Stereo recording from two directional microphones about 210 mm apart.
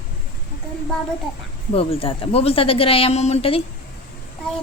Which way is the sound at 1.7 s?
25° left (ahead or behind).